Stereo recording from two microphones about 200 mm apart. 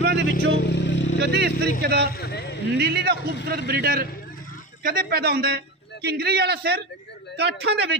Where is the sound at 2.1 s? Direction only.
55° left (ahead or behind).